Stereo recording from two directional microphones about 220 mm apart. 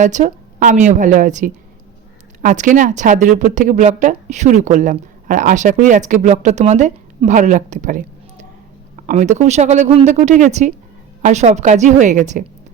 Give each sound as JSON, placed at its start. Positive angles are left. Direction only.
{"t": 0.0, "sound": "speech", "side_deg": -35}